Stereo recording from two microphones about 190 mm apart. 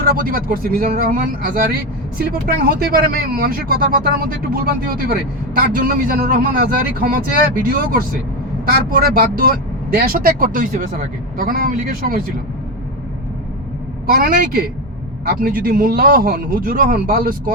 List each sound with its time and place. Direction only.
0.0 s a man's voice: 50° right (ahead or behind)
8.6 s a man's voice: 50° right (ahead or behind)
14.1 s a man's voice: 50° right (ahead or behind)